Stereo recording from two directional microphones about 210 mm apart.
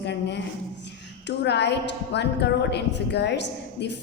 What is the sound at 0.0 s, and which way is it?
Speech, 55° left (ahead or behind).